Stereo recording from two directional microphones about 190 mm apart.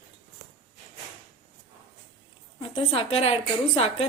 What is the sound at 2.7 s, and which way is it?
A woman's voice, 35° left (ahead or behind).